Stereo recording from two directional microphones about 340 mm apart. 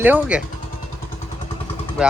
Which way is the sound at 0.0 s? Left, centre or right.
Centre.